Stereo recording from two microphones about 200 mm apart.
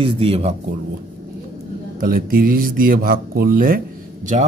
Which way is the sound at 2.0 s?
45° right (ahead or behind).